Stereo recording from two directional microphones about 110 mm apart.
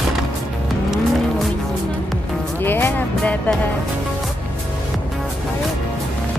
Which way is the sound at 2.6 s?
20° left (ahead or behind).